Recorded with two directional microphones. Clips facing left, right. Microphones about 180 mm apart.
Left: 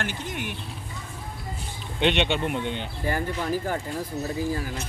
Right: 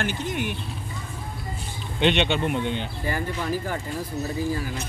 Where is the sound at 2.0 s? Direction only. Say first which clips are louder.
Right 2 dB; 10° left (ahead or behind).